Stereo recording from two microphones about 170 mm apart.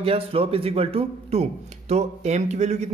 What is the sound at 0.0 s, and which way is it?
Speech, 35° right (ahead or behind).